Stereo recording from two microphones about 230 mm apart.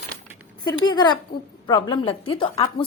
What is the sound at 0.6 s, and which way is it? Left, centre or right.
A woman's voice, centre.